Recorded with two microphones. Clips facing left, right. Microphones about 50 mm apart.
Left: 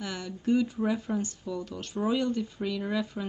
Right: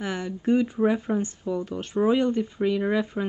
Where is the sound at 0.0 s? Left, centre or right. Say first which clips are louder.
Right 5 dB; right.